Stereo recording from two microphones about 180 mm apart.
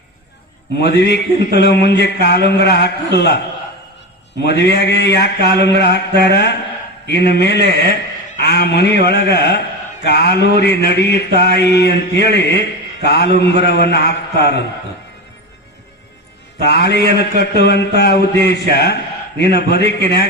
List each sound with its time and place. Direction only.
0.8 s mantra: 65° left (ahead or behind)
4.4 s mantra: 65° left (ahead or behind)
8.4 s a man's voice: 65° left (ahead or behind)
10.0 s mantra: 65° left (ahead or behind)
16.6 s a man's voice: 65° left (ahead or behind)